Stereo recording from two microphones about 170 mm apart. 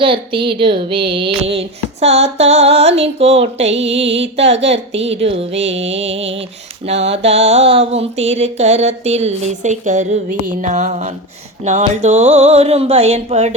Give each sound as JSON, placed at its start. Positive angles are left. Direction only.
{"t": 0.0, "sound": "mantra", "side_deg": -30}
{"t": 3.9, "sound": "music", "side_deg": -90}
{"t": 4.5, "sound": "mantra", "side_deg": -40}